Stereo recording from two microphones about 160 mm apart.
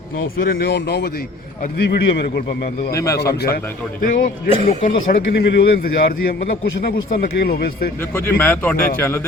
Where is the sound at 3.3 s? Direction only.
80° left.